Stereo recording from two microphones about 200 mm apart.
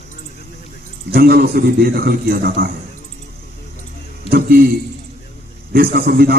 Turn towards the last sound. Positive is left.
turn(degrees=-50)  # may be behind; listen again after turning